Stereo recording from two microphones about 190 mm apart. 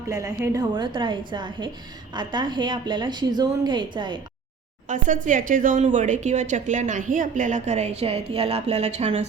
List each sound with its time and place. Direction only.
0.1 s a woman's voice: 20° right (ahead or behind)
4.9 s speech: 40° right (ahead or behind)